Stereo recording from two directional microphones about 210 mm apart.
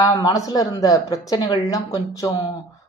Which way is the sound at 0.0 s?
20° left (ahead or behind).